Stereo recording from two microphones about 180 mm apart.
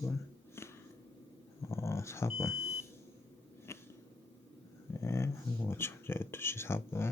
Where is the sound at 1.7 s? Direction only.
15° left (ahead or behind).